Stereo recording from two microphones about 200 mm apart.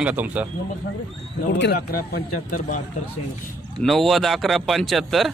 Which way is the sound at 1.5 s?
50° left (ahead or behind).